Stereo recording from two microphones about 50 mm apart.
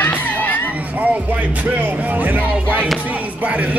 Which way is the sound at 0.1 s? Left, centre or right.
Left.